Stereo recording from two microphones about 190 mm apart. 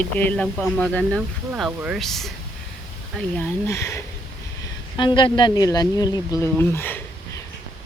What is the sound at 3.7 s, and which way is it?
Speech, 15° left (ahead or behind).